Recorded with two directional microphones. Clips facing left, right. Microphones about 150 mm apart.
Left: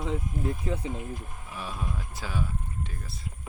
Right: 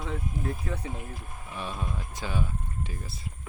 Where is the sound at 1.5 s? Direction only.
5° left (ahead or behind).